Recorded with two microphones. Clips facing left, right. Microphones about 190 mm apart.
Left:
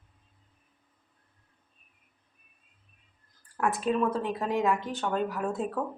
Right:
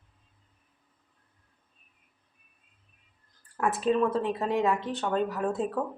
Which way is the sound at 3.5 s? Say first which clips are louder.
Right 2 dB; centre (ahead or behind).